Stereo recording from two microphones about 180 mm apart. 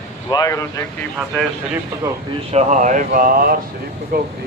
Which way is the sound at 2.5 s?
45° right (ahead or behind).